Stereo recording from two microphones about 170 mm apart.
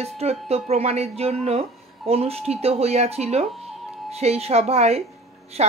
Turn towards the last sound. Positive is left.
turn(degrees=-35)  # may be behind; listen again after turning